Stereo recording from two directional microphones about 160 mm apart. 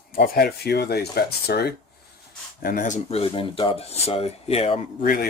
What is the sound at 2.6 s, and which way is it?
Speech, 60° left (ahead or behind).